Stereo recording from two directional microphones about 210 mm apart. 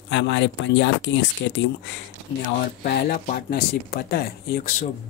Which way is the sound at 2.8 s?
45° left (ahead or behind).